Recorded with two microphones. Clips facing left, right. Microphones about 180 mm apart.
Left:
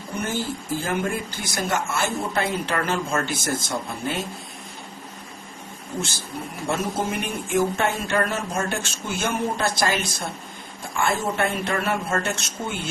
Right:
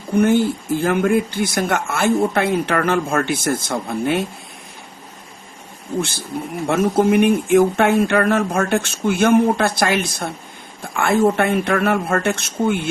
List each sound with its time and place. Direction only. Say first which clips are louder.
0.2 s a man's voice: right 13 dB; 60° right (ahead or behind)
6.7 s a man's voice: right 10 dB; 60° right (ahead or behind)